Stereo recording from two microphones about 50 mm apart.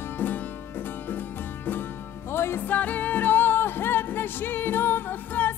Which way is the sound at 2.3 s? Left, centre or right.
Left.